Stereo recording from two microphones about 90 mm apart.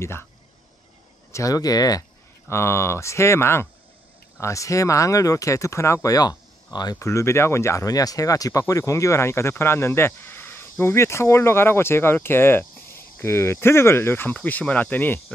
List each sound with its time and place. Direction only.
0.0 s speech: 30° left (ahead or behind)
1.3 s speech: 40° left (ahead or behind)
2.4 s speech: 30° left (ahead or behind)
6.0 s speech: 45° left (ahead or behind)
7.0 s speech: 30° left (ahead or behind)